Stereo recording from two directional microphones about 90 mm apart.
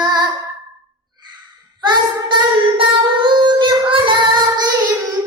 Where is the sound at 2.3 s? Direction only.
65° right (ahead or behind).